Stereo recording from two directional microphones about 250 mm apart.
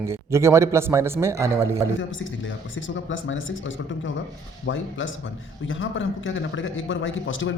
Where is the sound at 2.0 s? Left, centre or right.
Left.